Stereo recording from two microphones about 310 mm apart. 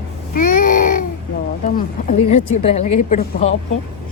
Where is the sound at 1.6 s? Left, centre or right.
Left.